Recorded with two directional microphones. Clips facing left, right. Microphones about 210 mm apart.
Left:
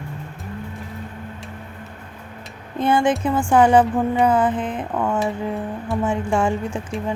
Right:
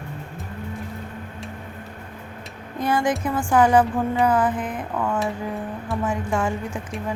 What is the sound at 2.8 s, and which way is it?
A woman's voice, 25° left (ahead or behind).